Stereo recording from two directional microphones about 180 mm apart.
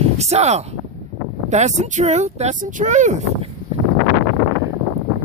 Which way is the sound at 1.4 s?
40° right (ahead or behind).